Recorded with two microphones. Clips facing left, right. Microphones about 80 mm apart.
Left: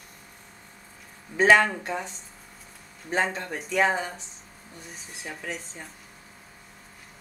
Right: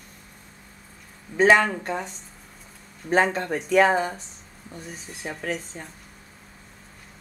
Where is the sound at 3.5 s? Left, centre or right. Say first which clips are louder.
Right 7 dB; right.